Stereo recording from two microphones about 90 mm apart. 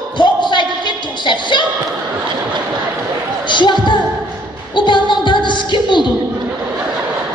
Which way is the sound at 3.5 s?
60° left (ahead or behind).